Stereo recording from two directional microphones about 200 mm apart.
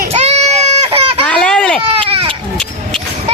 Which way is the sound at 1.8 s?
30° right (ahead or behind).